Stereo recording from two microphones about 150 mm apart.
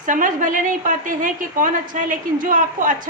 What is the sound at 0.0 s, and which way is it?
A woman's voice, 60° right (ahead or behind).